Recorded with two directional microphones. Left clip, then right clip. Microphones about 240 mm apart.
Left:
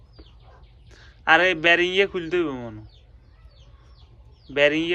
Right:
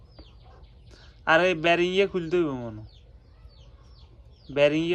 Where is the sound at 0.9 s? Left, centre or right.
Centre.